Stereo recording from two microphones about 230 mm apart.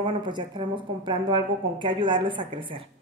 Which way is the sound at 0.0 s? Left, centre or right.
Centre.